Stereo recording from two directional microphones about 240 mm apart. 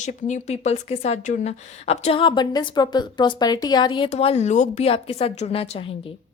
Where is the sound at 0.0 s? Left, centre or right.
Left.